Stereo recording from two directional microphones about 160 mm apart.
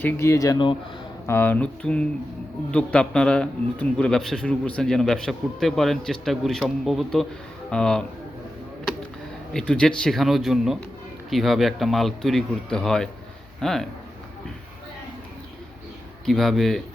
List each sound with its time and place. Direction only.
0.0 s speech: 20° left (ahead or behind)
1.3 s a man's voice: 10° left (ahead or behind)
9.5 s a man's voice: 5° left (ahead or behind)
16.2 s a man's voice: centre (ahead or behind)